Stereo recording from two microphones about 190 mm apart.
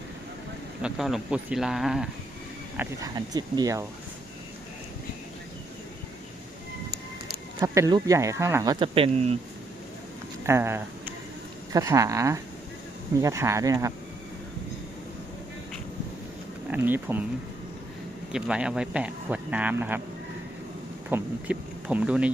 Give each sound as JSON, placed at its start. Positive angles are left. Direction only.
{"t": 0.8, "sound": "speech", "side_deg": -5}
{"t": 2.7, "sound": "speech", "side_deg": -20}
{"t": 7.6, "sound": "speech", "side_deg": -15}
{"t": 10.4, "sound": "speech", "side_deg": -15}
{"t": 16.6, "sound": "speech", "side_deg": -10}
{"t": 18.3, "sound": "speech", "side_deg": -5}
{"t": 21.1, "sound": "speech", "side_deg": -10}